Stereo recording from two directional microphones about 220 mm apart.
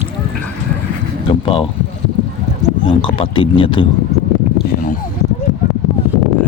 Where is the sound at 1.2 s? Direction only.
25° left (ahead or behind).